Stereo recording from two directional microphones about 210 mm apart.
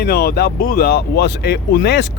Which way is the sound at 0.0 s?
50° left (ahead or behind).